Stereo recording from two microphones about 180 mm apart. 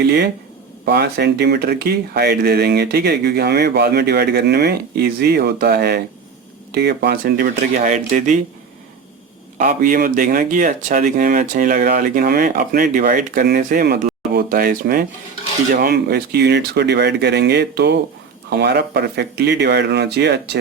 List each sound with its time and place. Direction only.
0.0 s speech: 60° right (ahead or behind)
7.8 s speech: 45° right (ahead or behind)
9.6 s speech: 55° right (ahead or behind)